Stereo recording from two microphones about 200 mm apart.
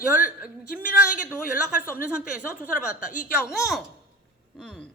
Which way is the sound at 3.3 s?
Centre (ahead or behind).